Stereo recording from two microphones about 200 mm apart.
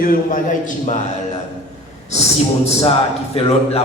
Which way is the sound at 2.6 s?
30° left (ahead or behind).